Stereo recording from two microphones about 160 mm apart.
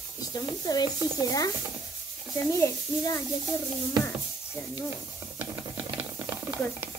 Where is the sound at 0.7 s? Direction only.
25° left (ahead or behind).